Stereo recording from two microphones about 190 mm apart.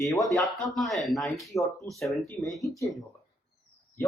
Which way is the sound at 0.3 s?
Centre (ahead or behind).